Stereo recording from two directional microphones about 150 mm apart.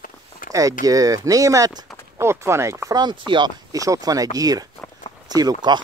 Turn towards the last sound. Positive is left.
turn(degrees=-25)  # may be behind; listen again after turning